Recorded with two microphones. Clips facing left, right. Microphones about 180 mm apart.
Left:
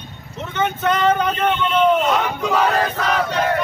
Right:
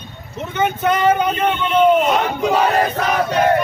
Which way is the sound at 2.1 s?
20° right (ahead or behind).